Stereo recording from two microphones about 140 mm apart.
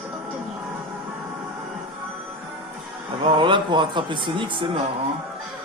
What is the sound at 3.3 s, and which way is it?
Speech, 35° right (ahead or behind).